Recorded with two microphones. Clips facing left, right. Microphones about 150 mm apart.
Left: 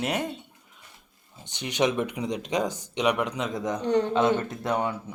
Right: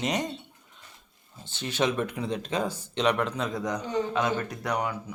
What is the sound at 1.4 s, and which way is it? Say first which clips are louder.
Speech: left 2 dB; 15° left (ahead or behind).